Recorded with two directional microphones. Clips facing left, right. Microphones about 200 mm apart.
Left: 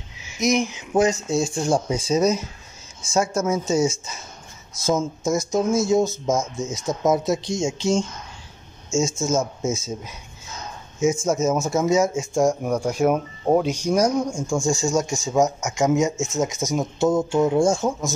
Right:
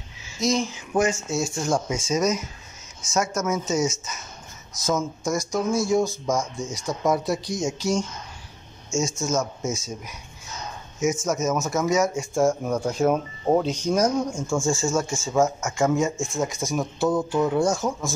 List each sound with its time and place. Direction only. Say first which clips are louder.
0.4 s speech: left 3 dB; 20° left (ahead or behind)
1.0 s speech: left 4 dB; 30° left (ahead or behind)
12.4 s speech: left 1 dB; 15° left (ahead or behind)